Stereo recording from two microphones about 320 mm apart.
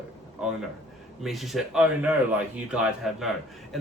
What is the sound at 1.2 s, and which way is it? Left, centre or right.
Speech, centre.